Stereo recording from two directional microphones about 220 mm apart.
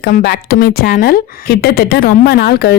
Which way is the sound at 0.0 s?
45° left (ahead or behind).